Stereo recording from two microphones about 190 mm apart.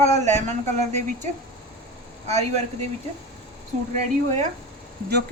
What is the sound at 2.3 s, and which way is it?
Speech, 35° right (ahead or behind).